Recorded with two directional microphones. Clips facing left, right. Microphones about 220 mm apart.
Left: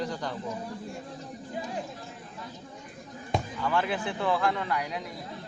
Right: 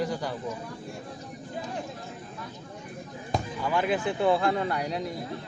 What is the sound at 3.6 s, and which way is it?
Speech, 15° right (ahead or behind).